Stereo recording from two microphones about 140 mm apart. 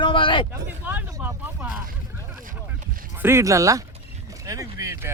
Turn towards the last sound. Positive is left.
turn(degrees=-20)  # may be behind; listen again after turning